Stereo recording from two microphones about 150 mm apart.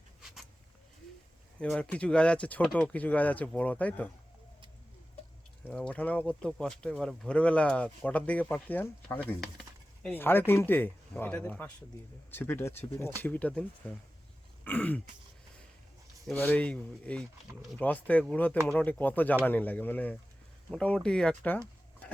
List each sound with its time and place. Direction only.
1.5 s speech: 5° left (ahead or behind)
5.6 s speech: 10° left (ahead or behind)
9.4 s a sound: centre (ahead or behind)
10.1 s speech: 15° left (ahead or behind)
14.6 s burping: 10° left (ahead or behind)
16.3 s speech: 10° left (ahead or behind)